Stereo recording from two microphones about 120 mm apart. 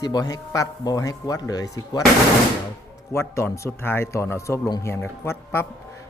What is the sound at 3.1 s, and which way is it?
A man's voice, 20° left (ahead or behind).